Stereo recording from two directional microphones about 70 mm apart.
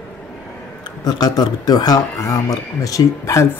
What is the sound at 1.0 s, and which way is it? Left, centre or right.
Speech, left.